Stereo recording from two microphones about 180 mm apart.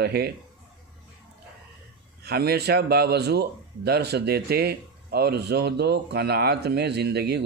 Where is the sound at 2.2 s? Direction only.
65° right (ahead or behind).